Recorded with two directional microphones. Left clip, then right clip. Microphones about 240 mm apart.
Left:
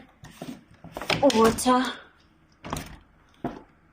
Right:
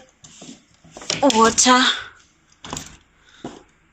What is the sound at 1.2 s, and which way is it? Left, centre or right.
Speech, centre.